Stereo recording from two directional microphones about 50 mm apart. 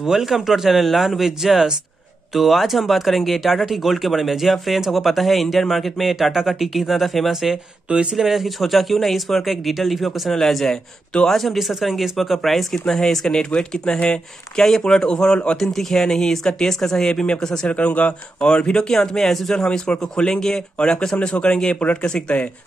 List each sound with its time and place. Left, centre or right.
0.0 s speech: centre
7.9 s speech: right
8.2 s speech: centre
17.7 s speech: left